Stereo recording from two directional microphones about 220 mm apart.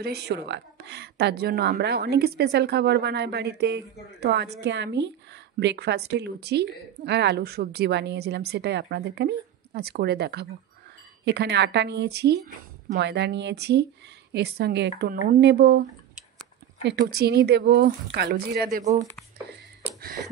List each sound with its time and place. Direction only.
0.0 s a woman's voice: 50° right (ahead or behind)
16.8 s a woman's voice: 45° right (ahead or behind)
19.5 s a sound: 40° right (ahead or behind)